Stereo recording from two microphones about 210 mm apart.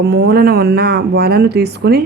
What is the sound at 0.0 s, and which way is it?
Speech, 50° right (ahead or behind).